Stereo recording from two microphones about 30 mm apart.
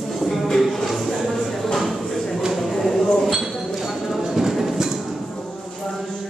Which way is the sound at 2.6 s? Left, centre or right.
Centre.